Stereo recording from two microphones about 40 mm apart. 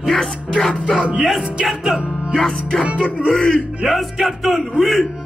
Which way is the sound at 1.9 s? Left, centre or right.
Centre.